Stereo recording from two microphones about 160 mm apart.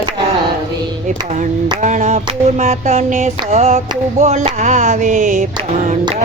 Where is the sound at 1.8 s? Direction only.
50° right (ahead or behind).